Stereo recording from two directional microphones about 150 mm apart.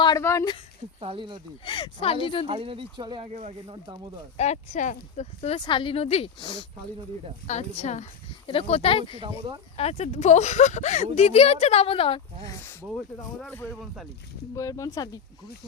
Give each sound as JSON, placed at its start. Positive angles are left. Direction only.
{"t": 0.2, "sound": "speech", "side_deg": 20}
{"t": 0.9, "sound": "speech", "side_deg": -35}
{"t": 1.6, "sound": "speech", "side_deg": 35}
{"t": 2.5, "sound": "speech", "side_deg": -40}
{"t": 4.4, "sound": "speech", "side_deg": 50}
{"t": 5.6, "sound": "speech", "side_deg": 35}
{"t": 7.4, "sound": "speech", "side_deg": 50}
{"t": 8.4, "sound": "speech", "side_deg": 40}
{"t": 13.5, "sound": "speech", "side_deg": 15}